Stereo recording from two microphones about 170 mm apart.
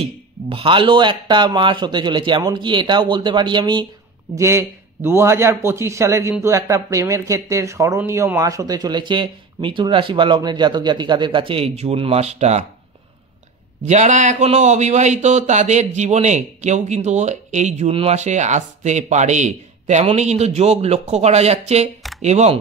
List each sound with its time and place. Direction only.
0.5 s speech: 30° right (ahead or behind)
4.4 s a man's voice: 15° right (ahead or behind); by 12.6 s 40° right (ahead or behind)
13.8 s a man's voice: 45° right (ahead or behind)